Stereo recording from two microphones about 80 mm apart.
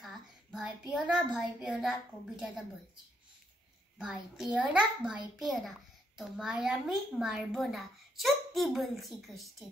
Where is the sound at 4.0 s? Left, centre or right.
Centre.